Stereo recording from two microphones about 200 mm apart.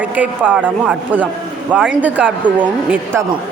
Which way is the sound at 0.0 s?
10° right (ahead or behind).